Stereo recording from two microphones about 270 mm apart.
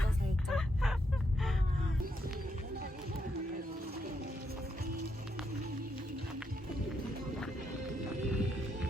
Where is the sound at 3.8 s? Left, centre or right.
Right.